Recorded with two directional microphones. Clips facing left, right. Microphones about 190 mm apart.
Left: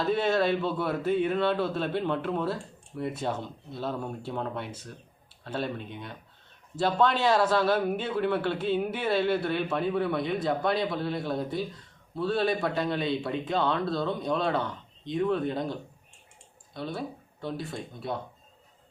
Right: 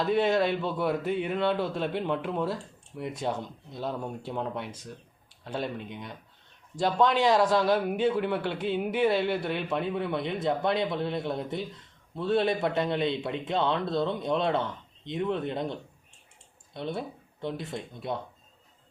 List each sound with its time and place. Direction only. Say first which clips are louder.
0.1 s a man's voice: even; 15° right (ahead or behind)